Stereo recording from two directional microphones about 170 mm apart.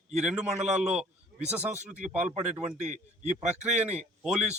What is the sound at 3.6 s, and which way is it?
Speech, 40° right (ahead or behind).